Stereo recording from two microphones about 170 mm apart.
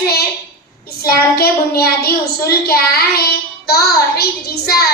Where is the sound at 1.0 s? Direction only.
65° left (ahead or behind).